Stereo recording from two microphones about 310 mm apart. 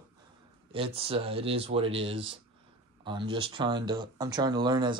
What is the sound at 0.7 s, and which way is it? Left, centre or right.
Speech, centre.